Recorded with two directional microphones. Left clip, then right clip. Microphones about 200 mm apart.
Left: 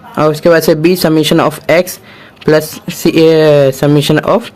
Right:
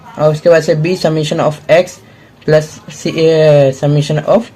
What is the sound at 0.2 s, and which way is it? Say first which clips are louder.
Speech: even; 55° left (ahead or behind).